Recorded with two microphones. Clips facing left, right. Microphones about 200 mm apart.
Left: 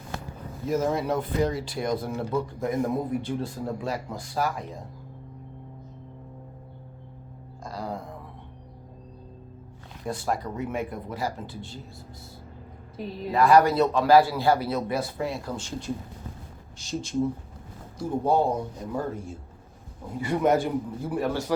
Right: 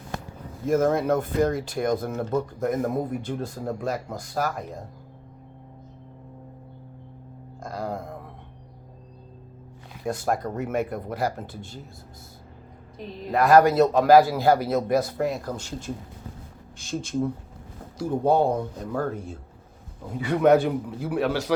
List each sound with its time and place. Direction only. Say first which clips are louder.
0.7 s a man's voice: right 4 dB; 50° right (ahead or behind)
7.6 s music: right 3 dB; 50° right (ahead or behind)
10.1 s a man's voice: right 3 dB; 45° right (ahead or behind)
10.8 s speech: right 4 dB; 60° right (ahead or behind)
13.3 s a man's voice: right 2 dB; 50° right (ahead or behind)
17.9 s speech: right 2 dB; 65° right (ahead or behind)
20.1 s a man's voice: right 4 dB; 70° right (ahead or behind)